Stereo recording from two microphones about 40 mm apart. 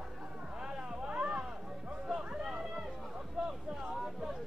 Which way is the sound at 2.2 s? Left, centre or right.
Centre.